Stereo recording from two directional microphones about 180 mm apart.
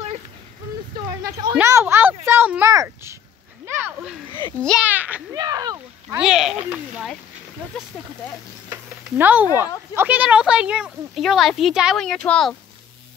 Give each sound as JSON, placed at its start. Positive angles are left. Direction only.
{"t": 0.9, "sound": "a sound", "side_deg": -25}
{"t": 4.6, "sound": "a woman's voice", "side_deg": 5}
{"t": 4.8, "sound": "a child's voice", "side_deg": -10}
{"t": 5.4, "sound": "a sound", "side_deg": -20}
{"t": 6.1, "sound": "a woman's voice", "side_deg": -5}
{"t": 9.2, "sound": "a woman's voice", "side_deg": -10}